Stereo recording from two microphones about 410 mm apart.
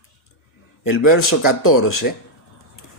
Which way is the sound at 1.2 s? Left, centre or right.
Left.